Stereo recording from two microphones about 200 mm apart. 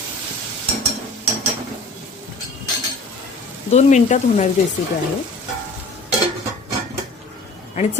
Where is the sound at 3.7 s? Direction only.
35° left (ahead or behind).